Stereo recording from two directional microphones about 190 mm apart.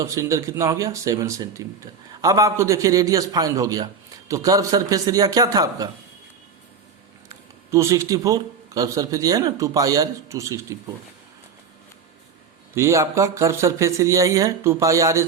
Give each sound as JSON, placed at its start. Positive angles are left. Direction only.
{"t": 0.0, "sound": "a man's voice", "side_deg": -15}
{"t": 7.7, "sound": "a man's voice", "side_deg": -15}
{"t": 12.7, "sound": "a man's voice", "side_deg": -15}